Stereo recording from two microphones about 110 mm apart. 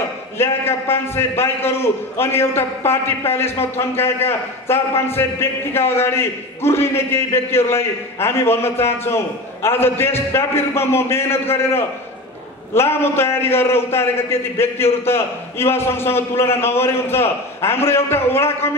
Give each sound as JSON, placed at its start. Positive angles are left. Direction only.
{"t": 0.4, "sound": "a man's voice", "side_deg": 20}